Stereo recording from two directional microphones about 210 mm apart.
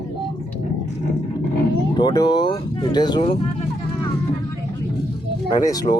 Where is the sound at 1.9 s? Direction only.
20° left (ahead or behind).